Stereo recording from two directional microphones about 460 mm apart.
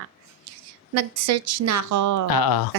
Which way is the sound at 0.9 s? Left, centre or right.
Right.